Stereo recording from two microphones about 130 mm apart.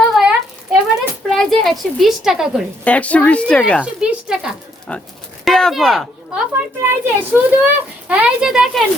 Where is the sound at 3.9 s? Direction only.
5° right (ahead or behind).